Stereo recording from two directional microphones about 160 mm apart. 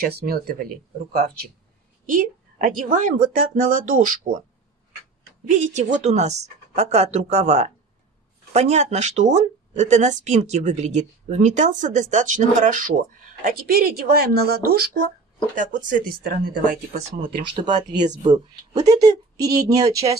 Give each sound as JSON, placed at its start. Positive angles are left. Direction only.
{"t": 0.0, "sound": "speech", "side_deg": -75}
{"t": 2.0, "sound": "speech", "side_deg": -55}
{"t": 5.5, "sound": "speech", "side_deg": -50}
{"t": 15.5, "sound": "speech", "side_deg": -55}
{"t": 17.3, "sound": "speech", "side_deg": -30}